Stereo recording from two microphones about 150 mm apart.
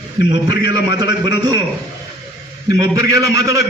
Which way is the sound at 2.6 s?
25° right (ahead or behind).